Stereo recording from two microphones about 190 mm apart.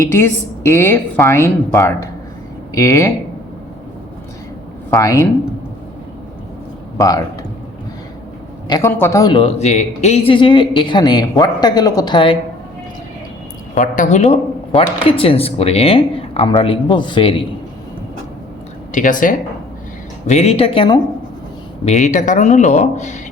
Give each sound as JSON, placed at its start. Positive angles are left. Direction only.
{"t": 0.0, "sound": "a woman's voice", "side_deg": 15}
{"t": 2.7, "sound": "a woman's voice", "side_deg": 15}
{"t": 4.9, "sound": "a woman's voice", "side_deg": 15}
{"t": 6.9, "sound": "speech", "side_deg": 20}
{"t": 8.6, "sound": "speech", "side_deg": 15}
{"t": 13.7, "sound": "a man's voice", "side_deg": 45}
{"t": 18.9, "sound": "speech", "side_deg": 45}
{"t": 21.8, "sound": "speech", "side_deg": 40}